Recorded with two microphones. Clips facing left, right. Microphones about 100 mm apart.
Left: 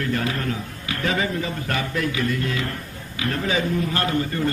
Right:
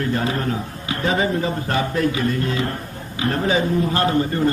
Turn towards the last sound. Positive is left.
turn(degrees=-30)  # may be behind; listen again after turning